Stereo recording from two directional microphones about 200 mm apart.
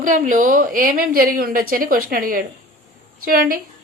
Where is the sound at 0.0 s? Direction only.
40° right (ahead or behind).